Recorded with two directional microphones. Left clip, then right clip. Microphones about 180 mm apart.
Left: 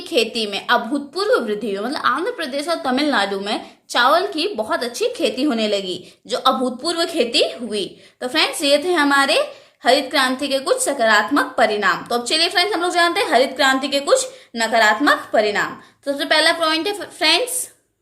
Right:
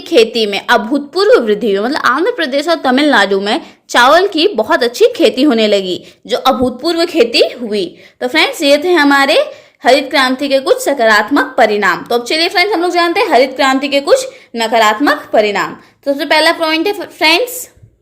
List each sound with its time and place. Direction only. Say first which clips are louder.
0.0 s a woman's voice: right 10 dB; 40° right (ahead or behind)